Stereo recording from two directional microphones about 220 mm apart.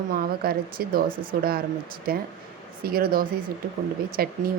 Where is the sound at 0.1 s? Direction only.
45° right (ahead or behind).